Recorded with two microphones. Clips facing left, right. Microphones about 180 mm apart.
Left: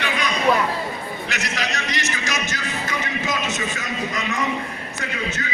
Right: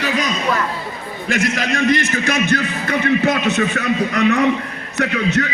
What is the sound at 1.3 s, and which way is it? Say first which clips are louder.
A man's voice: right 11 dB; 50° right (ahead or behind).